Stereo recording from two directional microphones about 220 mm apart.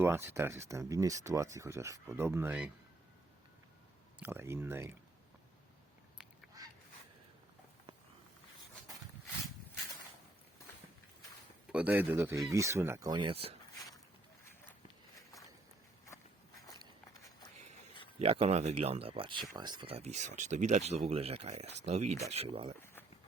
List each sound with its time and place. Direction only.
0.0 s speech: 10° right (ahead or behind)
4.2 s speech: 10° right (ahead or behind)
11.7 s speech: 5° right (ahead or behind); by 13.6 s 25° right (ahead or behind)
13.7 s a sound: 15° left (ahead or behind)
18.2 s speech: 25° right (ahead or behind)
22.8 s a sound: 10° left (ahead or behind)